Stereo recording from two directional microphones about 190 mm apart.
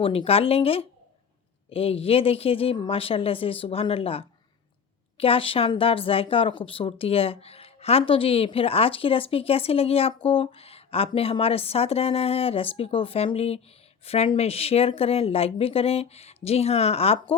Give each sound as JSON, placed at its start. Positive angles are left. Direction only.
{"t": 0.0, "sound": "speech", "side_deg": 30}